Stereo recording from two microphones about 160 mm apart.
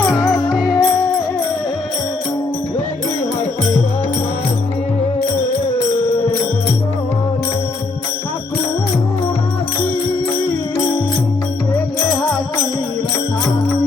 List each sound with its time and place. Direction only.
0.1 s music: 20° left (ahead or behind)